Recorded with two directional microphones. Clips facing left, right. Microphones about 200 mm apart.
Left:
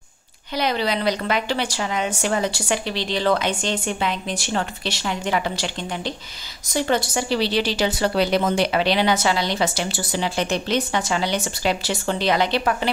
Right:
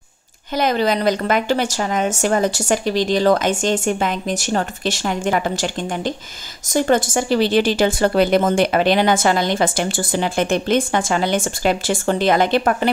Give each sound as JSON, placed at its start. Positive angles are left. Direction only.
{"t": 0.6, "sound": "a woman's voice", "side_deg": -45}